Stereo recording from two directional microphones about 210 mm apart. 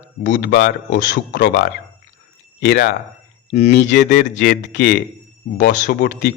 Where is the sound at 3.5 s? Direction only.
30° left (ahead or behind).